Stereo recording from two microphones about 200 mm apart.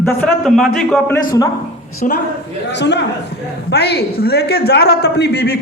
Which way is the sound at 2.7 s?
60° left (ahead or behind).